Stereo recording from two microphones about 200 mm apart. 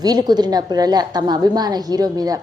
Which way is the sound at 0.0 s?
20° right (ahead or behind).